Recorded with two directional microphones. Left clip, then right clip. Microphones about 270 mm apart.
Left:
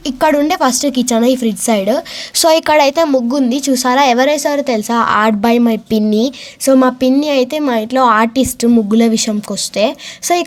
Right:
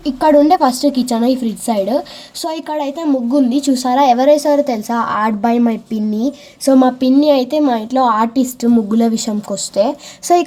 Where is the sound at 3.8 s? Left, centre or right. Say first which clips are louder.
Even; left.